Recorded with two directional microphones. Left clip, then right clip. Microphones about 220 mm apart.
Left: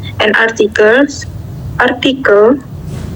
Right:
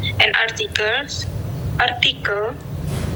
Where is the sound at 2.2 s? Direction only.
20° right (ahead or behind).